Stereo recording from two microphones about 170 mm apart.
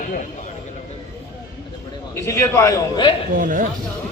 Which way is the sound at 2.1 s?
15° left (ahead or behind).